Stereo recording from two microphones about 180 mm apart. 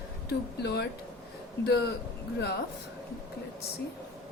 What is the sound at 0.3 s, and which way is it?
A woman's voice, 65° left (ahead or behind).